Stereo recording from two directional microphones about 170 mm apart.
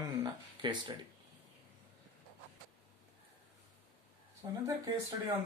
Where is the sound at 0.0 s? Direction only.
25° right (ahead or behind).